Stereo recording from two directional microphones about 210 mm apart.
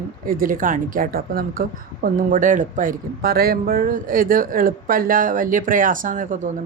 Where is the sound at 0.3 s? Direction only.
40° right (ahead or behind).